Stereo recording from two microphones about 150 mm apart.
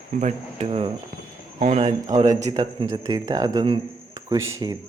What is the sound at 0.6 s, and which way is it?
Speech, 40° right (ahead or behind).